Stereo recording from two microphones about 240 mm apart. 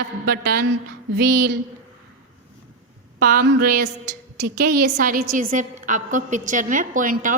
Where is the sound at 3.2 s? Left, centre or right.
Right.